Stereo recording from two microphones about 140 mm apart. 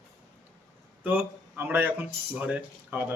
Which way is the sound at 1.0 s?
15° right (ahead or behind).